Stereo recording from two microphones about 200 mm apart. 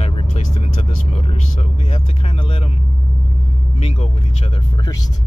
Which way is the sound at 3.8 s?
30° left (ahead or behind).